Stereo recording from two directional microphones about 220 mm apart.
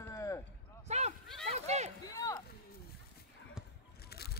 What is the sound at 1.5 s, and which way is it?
Run, 30° right (ahead or behind).